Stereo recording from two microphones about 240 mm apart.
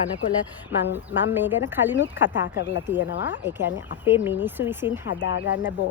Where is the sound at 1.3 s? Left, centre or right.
Centre.